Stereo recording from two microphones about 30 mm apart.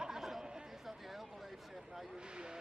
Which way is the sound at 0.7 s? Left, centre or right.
Centre.